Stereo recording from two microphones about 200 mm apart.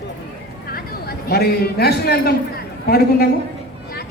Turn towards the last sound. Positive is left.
turn(degrees=50)  # may be behind; listen again after turning